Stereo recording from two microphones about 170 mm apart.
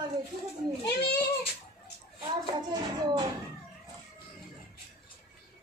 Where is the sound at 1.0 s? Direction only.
75° left (ahead or behind).